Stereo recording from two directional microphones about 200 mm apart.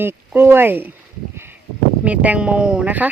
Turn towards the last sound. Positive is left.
turn(degrees=-10)  # may be behind; listen again after turning